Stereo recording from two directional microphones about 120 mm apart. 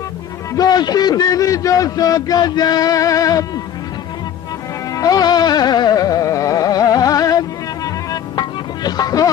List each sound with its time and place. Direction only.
0.5 s a man's voice: 35° left (ahead or behind)
4.9 s music: 30° left (ahead or behind)